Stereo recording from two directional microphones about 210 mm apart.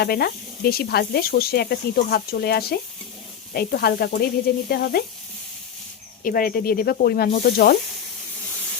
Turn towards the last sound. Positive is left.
turn(degrees=45)  # may be behind; listen again after turning